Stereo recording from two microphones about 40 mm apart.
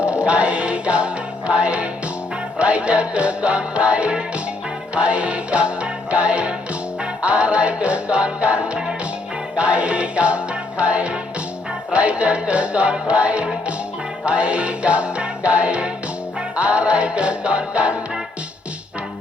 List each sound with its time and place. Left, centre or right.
0.0 s music: right